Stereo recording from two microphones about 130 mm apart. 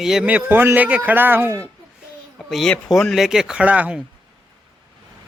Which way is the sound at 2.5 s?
Centre (ahead or behind).